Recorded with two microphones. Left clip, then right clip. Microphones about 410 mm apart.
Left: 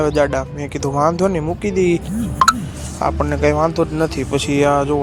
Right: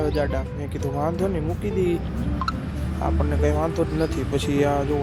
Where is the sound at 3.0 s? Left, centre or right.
Right.